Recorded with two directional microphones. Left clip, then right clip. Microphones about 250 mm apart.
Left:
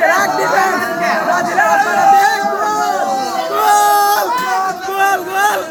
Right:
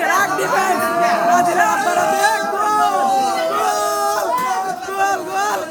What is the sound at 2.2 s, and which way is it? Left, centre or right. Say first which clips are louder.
Music: left 3 dB; centre.